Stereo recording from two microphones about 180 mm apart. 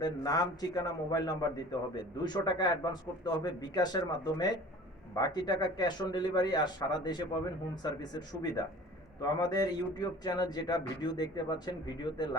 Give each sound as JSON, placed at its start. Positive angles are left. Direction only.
{"t": 0.0, "sound": "a man's voice", "side_deg": 20}